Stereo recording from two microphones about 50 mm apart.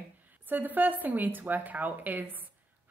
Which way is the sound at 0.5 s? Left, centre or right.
Right.